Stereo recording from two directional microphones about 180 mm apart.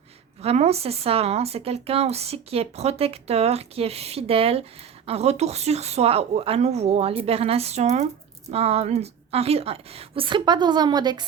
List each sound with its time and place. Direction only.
0.4 s speech: 35° right (ahead or behind)